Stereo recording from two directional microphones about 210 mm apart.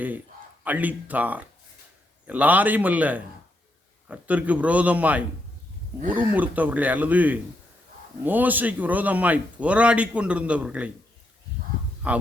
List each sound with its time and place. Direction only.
0.6 s a man's voice: 5° right (ahead or behind)
12.0 s a man's voice: 5° right (ahead or behind)